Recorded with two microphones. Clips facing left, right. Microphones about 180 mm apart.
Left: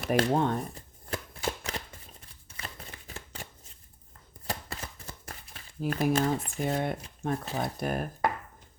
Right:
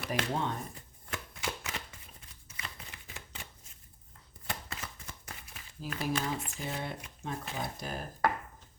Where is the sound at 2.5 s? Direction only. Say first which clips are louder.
Left 3 dB; 35° left (ahead or behind).